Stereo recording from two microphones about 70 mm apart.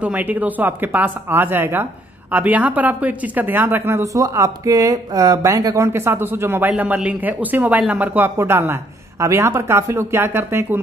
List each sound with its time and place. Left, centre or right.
0.0 s speech: right
4.0 s speech: right
5.8 s speech: right
6.7 s speech: centre
8.4 s speech: right